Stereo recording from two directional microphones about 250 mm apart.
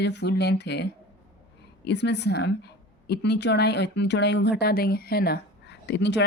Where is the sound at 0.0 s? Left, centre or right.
Left.